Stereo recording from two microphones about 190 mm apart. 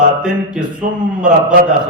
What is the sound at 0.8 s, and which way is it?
Speech, 45° right (ahead or behind).